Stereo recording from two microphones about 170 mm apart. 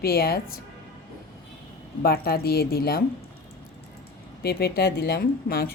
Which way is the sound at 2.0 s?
65° left (ahead or behind).